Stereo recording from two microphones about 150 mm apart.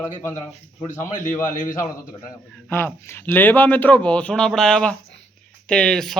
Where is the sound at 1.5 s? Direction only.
60° left (ahead or behind).